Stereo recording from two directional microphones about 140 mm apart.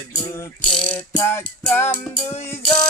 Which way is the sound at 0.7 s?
10° left (ahead or behind).